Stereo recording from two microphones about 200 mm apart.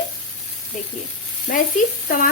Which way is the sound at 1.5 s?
40° left (ahead or behind).